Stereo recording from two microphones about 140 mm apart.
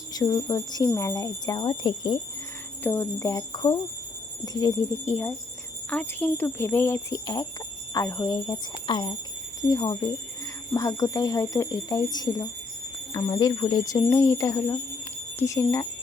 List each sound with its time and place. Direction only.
0.1 s speech: 30° left (ahead or behind)
2.8 s speech: 20° left (ahead or behind)